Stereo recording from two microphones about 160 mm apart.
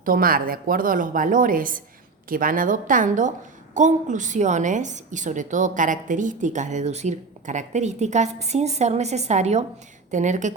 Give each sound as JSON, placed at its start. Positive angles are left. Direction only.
{"t": 0.0, "sound": "a woman's voice", "side_deg": -65}